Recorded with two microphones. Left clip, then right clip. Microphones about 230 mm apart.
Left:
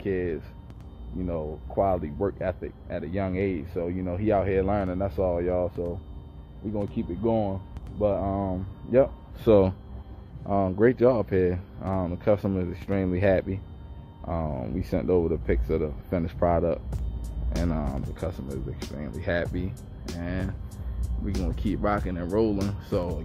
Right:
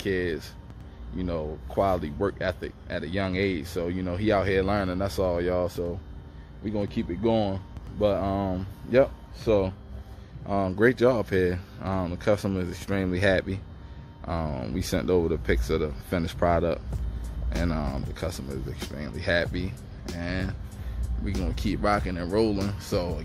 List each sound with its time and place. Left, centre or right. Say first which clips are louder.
0.0 s speech: right 1 dB; centre
9.4 s speech: left 4 dB; left
10.4 s speech: left 1 dB; centre